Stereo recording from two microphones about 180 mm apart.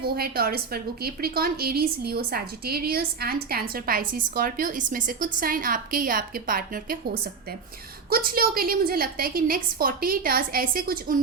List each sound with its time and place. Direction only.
0.0 s a woman's voice: 55° right (ahead or behind)